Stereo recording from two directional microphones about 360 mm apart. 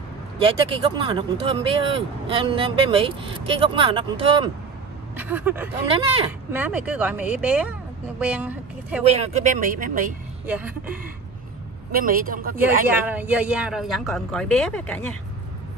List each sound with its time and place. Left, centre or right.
0.4 s speech: centre
9.0 s speech: centre
10.4 s speech: centre
11.9 s speech: right
13.0 s speech: centre